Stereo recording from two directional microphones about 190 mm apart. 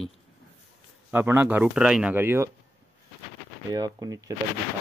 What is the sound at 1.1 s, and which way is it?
Speech, 10° right (ahead or behind).